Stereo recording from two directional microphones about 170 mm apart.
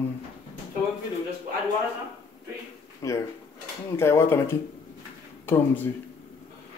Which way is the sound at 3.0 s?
20° left (ahead or behind).